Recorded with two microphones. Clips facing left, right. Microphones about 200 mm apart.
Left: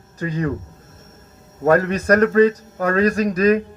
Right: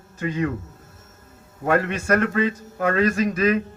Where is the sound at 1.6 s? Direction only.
40° left (ahead or behind).